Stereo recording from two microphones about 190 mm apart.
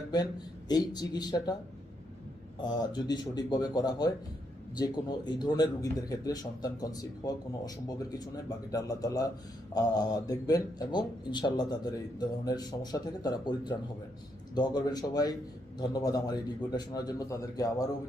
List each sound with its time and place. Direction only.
0.7 s a man's voice: 20° left (ahead or behind)
2.6 s a man's voice: 20° left (ahead or behind)